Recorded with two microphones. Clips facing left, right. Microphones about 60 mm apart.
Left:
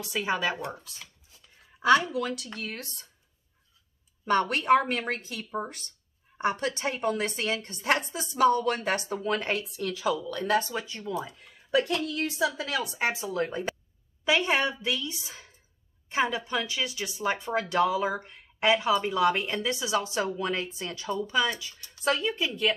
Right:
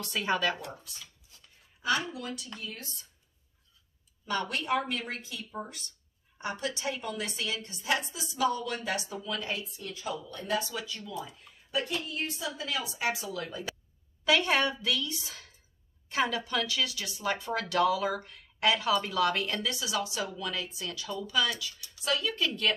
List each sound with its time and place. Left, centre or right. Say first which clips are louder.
0.0 s speech: left 1 dB; centre
1.8 s a woman's voice: left 9 dB; left
4.3 s a woman's voice: left 8 dB; left
10.6 s speech: left 3 dB; left
11.9 s a woman's voice: left 5 dB; left
12.8 s speech: left 3 dB; left
14.2 s speech: left 1 dB; left
22.3 s speech: left 2 dB; centre